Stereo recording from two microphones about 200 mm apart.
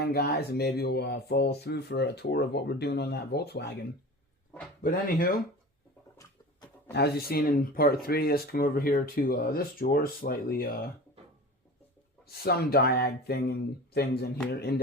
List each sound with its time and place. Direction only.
0.0 s speech: 50° left (ahead or behind)
4.8 s speech: 45° left (ahead or behind)
6.9 s speech: 50° left (ahead or behind)
12.2 s speech: 50° left (ahead or behind)